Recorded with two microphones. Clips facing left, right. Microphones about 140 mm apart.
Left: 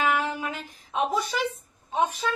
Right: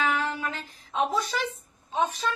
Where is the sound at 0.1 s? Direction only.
15° left (ahead or behind).